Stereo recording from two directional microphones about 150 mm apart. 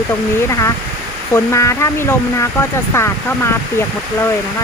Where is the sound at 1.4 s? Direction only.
20° left (ahead or behind).